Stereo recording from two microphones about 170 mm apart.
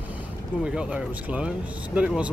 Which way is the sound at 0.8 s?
5° right (ahead or behind).